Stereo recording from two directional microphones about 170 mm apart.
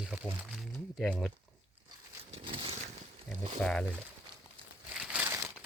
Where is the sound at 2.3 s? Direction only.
30° right (ahead or behind).